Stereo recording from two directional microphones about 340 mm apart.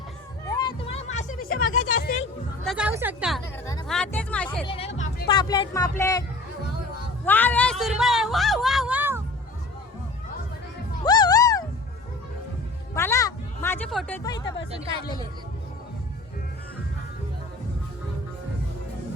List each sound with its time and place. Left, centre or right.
0.5 s music: centre
2.6 s speech: centre
3.7 s music: centre
4.6 s music: centre
4.9 s speech: left
7.3 s speech: centre
11.0 s music: centre
12.9 s music: centre